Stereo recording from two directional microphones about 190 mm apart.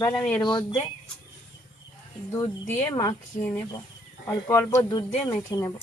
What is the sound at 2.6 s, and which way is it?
Speech, 10° left (ahead or behind).